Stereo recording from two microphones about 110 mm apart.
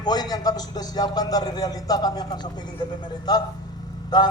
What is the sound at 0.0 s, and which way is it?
A man's voice, 40° left (ahead or behind).